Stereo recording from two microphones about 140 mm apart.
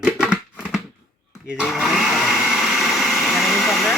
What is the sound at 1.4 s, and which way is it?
Blender, 5° right (ahead or behind).